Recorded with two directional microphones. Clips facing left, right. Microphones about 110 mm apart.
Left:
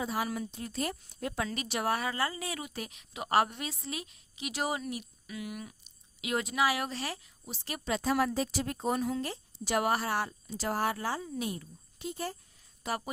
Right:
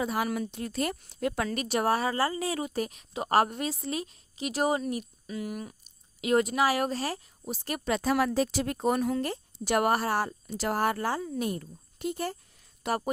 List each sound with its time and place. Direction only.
0.0 s speech: 60° right (ahead or behind)
1.5 s speech: 50° right (ahead or behind); by 13.0 s 65° right (ahead or behind)